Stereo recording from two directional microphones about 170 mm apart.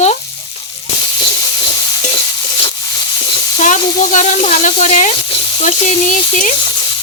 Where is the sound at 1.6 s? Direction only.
30° left (ahead or behind).